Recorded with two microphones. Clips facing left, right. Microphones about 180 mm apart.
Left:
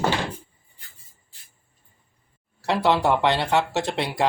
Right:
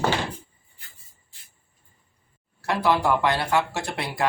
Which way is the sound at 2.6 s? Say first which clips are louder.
Left 2 dB; 25° left (ahead or behind).